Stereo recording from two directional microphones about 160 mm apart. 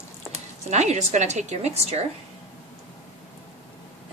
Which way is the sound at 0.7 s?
45° right (ahead or behind).